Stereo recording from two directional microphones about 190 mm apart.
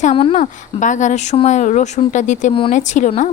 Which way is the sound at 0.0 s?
35° left (ahead or behind).